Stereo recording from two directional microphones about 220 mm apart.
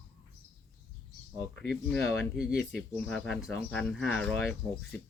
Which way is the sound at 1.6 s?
Centre (ahead or behind).